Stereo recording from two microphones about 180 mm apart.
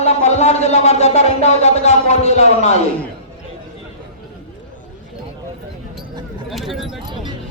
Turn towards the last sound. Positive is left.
turn(degrees=0)  # may be behind; listen again after turning